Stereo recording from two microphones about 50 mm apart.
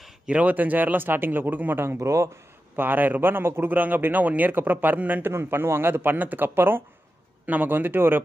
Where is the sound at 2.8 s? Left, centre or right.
Right.